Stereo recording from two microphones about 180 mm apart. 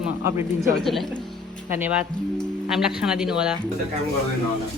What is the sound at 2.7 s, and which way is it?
Speech, 5° right (ahead or behind).